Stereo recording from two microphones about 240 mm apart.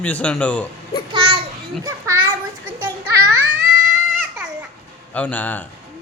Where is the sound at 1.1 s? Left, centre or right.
Right.